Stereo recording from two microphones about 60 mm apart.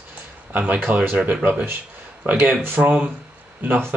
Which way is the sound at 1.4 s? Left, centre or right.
Right.